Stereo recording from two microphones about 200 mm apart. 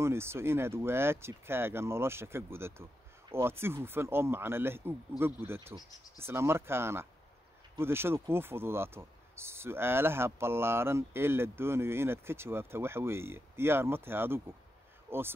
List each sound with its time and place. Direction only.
0.0 s speech: 10° right (ahead or behind)